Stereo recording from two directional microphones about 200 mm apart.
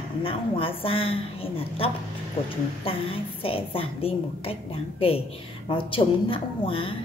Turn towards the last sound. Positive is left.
turn(degrees=25)  # may be behind; listen again after turning